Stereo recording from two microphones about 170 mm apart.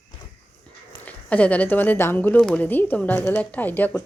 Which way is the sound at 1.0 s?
10° left (ahead or behind).